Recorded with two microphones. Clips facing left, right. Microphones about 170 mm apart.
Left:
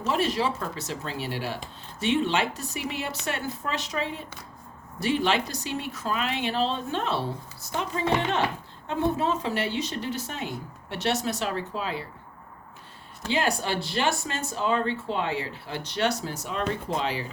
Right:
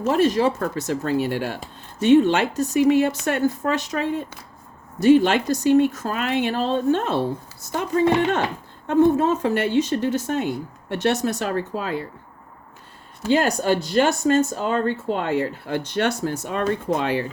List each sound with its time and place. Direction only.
0.0 s speech: 50° right (ahead or behind)
13.3 s speech: 45° right (ahead or behind)